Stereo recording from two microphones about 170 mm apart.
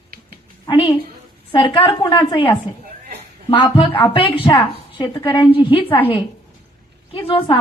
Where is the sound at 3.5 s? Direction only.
30° left (ahead or behind).